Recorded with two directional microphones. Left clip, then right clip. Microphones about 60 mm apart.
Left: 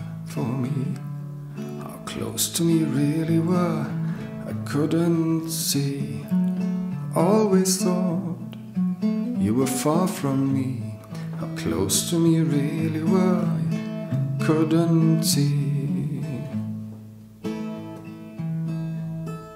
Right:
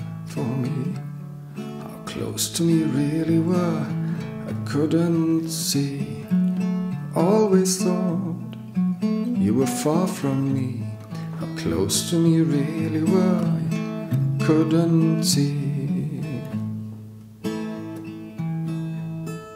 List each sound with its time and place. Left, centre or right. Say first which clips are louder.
0.5 s music: right 1 dB; centre
2.1 s music: right 1 dB; centre
5.8 s music: right 1 dB; centre
6.3 s music: right 2 dB; right
7.2 s music: right 1 dB; centre
9.0 s music: right 1 dB; right
9.4 s music: right 1 dB; centre
11.5 s music: right 1 dB; centre
13.7 s music: right 2 dB; right
14.4 s music: right 1 dB; centre
15.2 s music: right 1 dB; centre
17.5 s music: right 2 dB; right